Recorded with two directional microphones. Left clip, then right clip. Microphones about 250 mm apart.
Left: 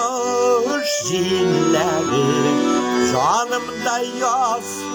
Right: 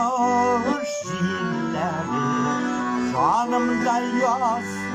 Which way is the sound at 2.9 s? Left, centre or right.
Left.